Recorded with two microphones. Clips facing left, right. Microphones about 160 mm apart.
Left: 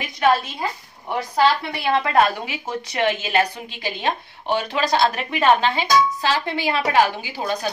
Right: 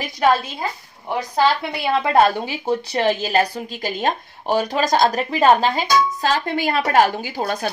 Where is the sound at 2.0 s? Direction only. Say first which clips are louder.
Right 3 dB; 30° right (ahead or behind).